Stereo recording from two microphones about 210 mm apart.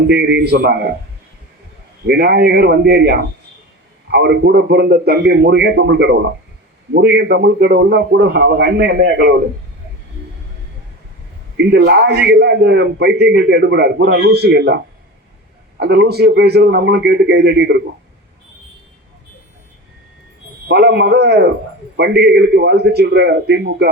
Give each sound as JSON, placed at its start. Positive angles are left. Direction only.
{"t": 0.1, "sound": "a man's voice", "side_deg": -50}
{"t": 2.0, "sound": "a man's voice", "side_deg": -50}
{"t": 11.5, "sound": "a man's voice", "side_deg": -50}
{"t": 15.8, "sound": "a man's voice", "side_deg": -50}
{"t": 20.7, "sound": "a man's voice", "side_deg": -50}